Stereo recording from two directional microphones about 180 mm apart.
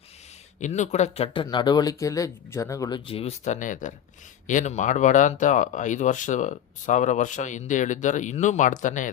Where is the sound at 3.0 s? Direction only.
30° left (ahead or behind).